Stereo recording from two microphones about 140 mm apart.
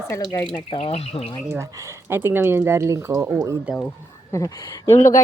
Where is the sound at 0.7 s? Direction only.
45° left (ahead or behind).